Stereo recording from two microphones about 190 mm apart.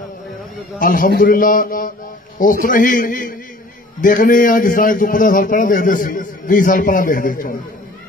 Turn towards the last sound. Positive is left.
turn(degrees=45)  # may be behind; listen again after turning